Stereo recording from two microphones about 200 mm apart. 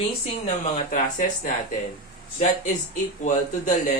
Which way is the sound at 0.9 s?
40° left (ahead or behind).